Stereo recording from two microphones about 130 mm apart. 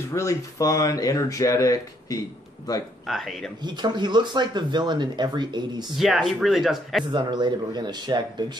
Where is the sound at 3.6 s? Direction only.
35° right (ahead or behind).